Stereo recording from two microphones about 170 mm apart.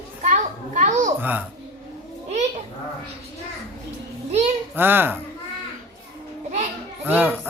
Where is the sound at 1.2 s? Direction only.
10° right (ahead or behind).